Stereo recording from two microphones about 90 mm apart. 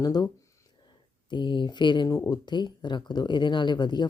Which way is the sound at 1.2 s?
60° left (ahead or behind).